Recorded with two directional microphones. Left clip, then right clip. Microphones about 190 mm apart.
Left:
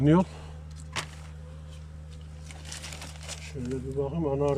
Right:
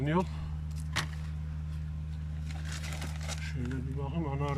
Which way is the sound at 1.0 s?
Centre (ahead or behind).